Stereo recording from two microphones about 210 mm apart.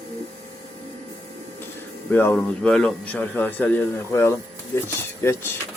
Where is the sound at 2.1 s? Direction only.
10° left (ahead or behind).